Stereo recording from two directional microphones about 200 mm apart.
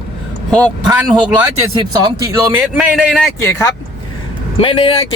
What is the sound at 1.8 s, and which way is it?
Speech, 20° right (ahead or behind).